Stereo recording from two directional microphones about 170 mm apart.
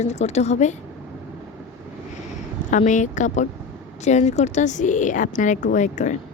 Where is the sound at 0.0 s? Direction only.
40° left (ahead or behind).